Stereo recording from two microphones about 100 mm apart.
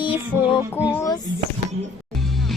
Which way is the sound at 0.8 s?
15° right (ahead or behind).